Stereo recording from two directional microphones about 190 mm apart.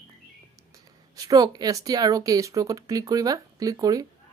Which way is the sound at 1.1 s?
20° right (ahead or behind).